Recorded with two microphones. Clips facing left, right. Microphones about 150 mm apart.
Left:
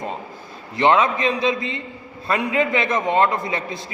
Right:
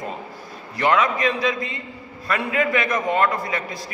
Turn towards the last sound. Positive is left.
turn(degrees=25)  # may be behind; listen again after turning